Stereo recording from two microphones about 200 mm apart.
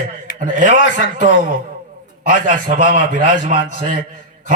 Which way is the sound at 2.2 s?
45° right (ahead or behind).